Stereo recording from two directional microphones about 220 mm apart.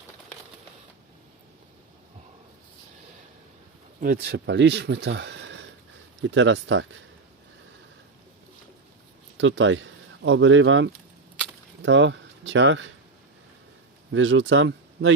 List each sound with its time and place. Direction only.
4.0 s speech: 45° right (ahead or behind)
9.4 s speech: 60° right (ahead or behind)
14.1 s speech: 60° right (ahead or behind)